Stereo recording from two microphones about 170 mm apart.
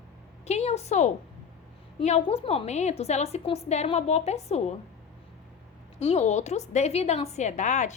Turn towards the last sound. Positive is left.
turn(degrees=45)  # may be behind; listen again after turning